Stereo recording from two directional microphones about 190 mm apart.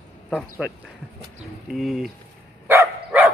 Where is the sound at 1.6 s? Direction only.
Centre (ahead or behind).